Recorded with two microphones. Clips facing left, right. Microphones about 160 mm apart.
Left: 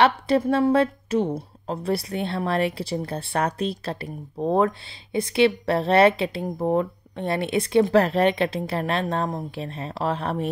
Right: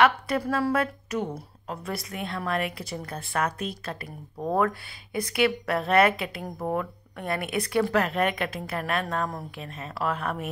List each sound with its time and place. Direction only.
0.0 s speech: 30° left (ahead or behind)